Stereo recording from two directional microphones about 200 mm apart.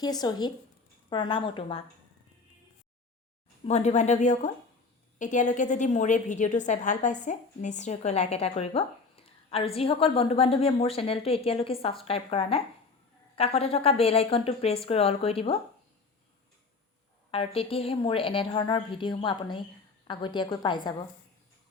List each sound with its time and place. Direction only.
0.0 s a woman's voice: 20° left (ahead or behind)
3.7 s a woman's voice: 35° left (ahead or behind)
17.3 s a woman's voice: 30° left (ahead or behind)